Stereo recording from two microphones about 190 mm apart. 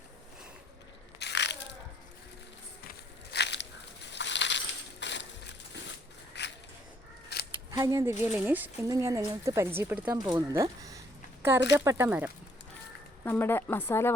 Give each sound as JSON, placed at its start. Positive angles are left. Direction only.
{"t": 1.2, "sound": "crushing", "side_deg": 65}
{"t": 3.3, "sound": "a sound", "side_deg": 65}
{"t": 4.1, "sound": "crushing", "side_deg": 70}
{"t": 6.3, "sound": "a sound", "side_deg": 65}
{"t": 7.7, "sound": "speech", "side_deg": -15}
{"t": 13.2, "sound": "speech", "side_deg": 10}